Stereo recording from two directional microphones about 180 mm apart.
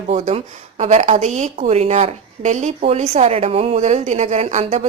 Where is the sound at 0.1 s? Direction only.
35° right (ahead or behind).